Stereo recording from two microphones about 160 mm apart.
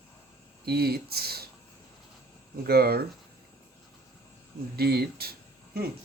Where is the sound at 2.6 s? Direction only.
75° right (ahead or behind).